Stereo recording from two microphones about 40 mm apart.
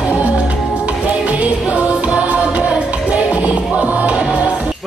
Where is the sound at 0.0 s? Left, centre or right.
Right.